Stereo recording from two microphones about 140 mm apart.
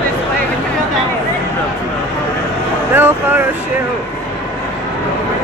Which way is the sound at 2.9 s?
15° right (ahead or behind).